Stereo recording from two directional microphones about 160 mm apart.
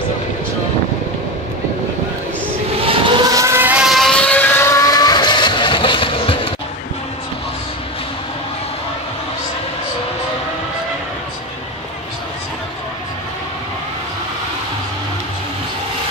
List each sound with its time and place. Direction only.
2.8 s vehicle: 35° right (ahead or behind); by 6.5 s 35° left (ahead or behind)